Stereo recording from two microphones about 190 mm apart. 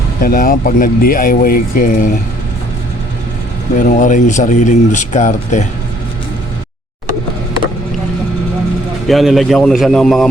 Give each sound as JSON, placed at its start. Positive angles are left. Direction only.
{"t": 0.2, "sound": "speech", "side_deg": 50}
{"t": 3.8, "sound": "speech", "side_deg": 45}
{"t": 9.0, "sound": "a man's voice", "side_deg": 0}